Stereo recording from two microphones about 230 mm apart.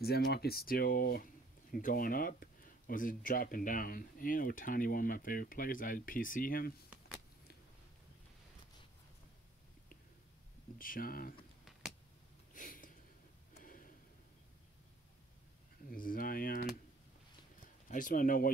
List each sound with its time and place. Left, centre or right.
0.0 s speech: left
10.8 s speech: left
12.5 s a sound: left
15.9 s speech: left
17.8 s speech: left